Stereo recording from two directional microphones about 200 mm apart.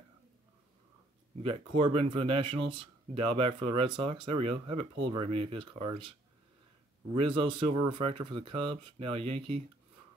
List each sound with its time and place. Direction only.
1.5 s speech: 25° right (ahead or behind)
7.2 s speech: 25° right (ahead or behind)